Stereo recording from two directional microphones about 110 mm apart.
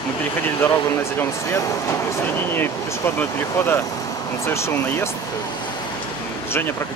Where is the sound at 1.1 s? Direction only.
25° left (ahead or behind).